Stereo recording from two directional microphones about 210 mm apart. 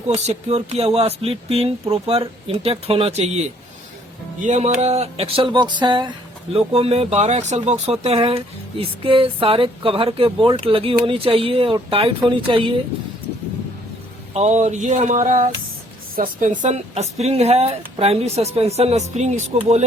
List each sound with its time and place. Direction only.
0.1 s speech: 30° right (ahead or behind)
14.3 s speech: 35° right (ahead or behind)